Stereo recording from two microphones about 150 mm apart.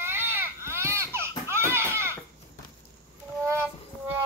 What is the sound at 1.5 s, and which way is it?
Children playing, 15° right (ahead or behind).